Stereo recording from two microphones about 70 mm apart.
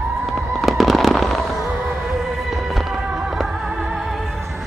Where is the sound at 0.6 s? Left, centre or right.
Centre.